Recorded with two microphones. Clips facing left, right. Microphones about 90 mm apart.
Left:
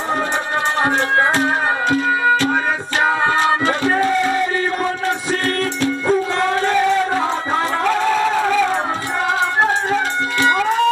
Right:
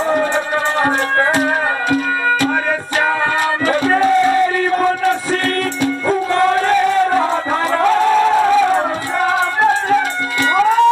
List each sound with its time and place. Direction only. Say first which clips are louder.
1.9 s music: left 2 dB; 25° left (ahead or behind)
10.4 s music: right 3 dB; 20° left (ahead or behind)